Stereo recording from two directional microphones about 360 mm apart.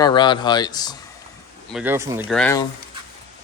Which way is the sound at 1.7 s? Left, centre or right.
Centre.